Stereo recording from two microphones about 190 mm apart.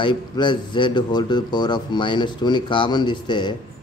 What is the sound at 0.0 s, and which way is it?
Speech, 25° left (ahead or behind).